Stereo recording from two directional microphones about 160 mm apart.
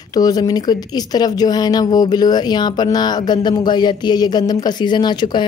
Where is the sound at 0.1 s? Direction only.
25° left (ahead or behind).